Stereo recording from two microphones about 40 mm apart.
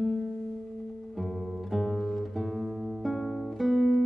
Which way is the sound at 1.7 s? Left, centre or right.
Centre.